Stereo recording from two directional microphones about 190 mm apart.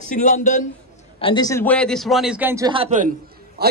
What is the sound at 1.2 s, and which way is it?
Speech, 25° left (ahead or behind).